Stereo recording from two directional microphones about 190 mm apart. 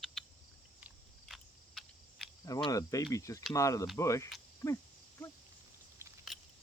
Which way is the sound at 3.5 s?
15° left (ahead or behind).